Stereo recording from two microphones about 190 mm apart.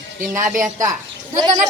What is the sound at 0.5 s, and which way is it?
A woman's voice, 15° right (ahead or behind).